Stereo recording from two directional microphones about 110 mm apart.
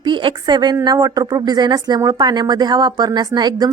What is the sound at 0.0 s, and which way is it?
A woman's voice, 45° right (ahead or behind).